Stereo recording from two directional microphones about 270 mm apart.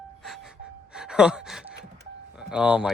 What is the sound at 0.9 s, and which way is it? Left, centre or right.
Sigh, centre.